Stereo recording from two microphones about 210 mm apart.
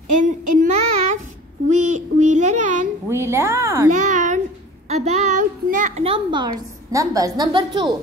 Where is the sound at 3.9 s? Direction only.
35° right (ahead or behind).